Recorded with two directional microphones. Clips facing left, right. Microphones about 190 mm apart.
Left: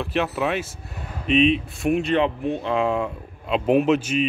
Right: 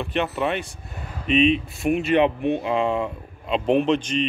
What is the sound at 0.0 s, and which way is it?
A man's voice, centre (ahead or behind).